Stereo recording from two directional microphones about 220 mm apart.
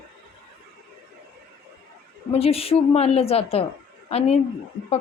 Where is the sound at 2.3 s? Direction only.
25° left (ahead or behind).